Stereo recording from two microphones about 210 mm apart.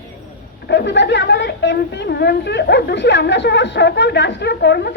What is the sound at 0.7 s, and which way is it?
A woman's voice, 55° left (ahead or behind).